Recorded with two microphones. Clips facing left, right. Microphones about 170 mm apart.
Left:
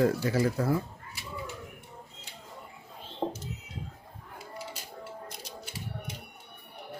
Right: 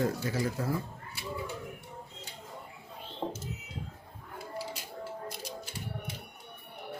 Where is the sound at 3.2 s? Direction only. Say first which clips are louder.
Left 4 dB; 20° left (ahead or behind).